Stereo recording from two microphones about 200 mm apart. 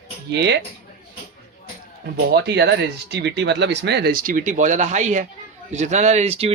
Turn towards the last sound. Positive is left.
turn(degrees=-30)  # may be behind; listen again after turning